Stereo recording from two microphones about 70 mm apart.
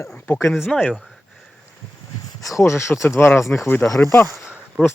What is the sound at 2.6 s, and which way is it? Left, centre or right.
Speech, left.